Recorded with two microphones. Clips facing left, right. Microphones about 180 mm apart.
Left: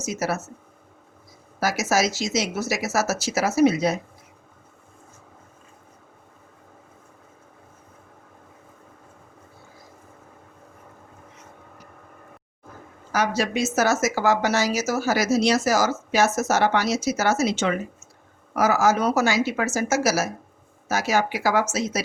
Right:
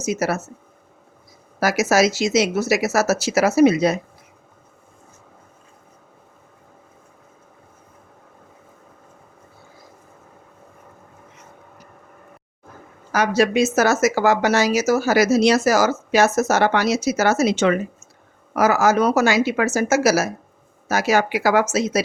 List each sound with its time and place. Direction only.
0.0 s speech: 65° right (ahead or behind)
1.5 s speech: 65° right (ahead or behind)
13.1 s speech: 65° right (ahead or behind)